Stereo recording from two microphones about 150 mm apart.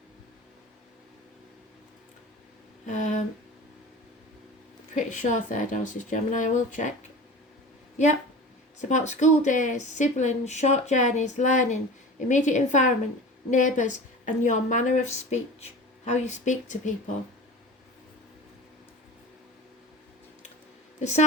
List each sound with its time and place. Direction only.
2.8 s a sound: 55° left (ahead or behind)
4.9 s speech: 55° left (ahead or behind)
8.8 s speech: 55° left (ahead or behind)
21.0 s speech: 50° left (ahead or behind)